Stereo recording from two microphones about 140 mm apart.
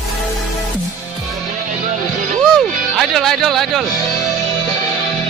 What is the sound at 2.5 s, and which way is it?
Music, centre (ahead or behind).